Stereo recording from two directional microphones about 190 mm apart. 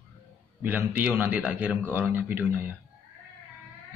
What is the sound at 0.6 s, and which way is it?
Speech, 10° right (ahead or behind).